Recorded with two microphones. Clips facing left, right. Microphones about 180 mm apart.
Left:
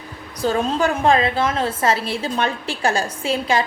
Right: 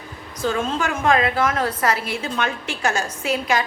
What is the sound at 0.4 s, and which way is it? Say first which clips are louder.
A woman's voice: left 3 dB; 35° left (ahead or behind).